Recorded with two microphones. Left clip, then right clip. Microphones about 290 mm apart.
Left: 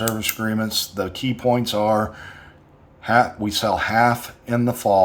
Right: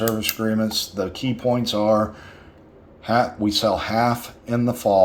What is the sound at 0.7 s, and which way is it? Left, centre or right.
Speech, centre.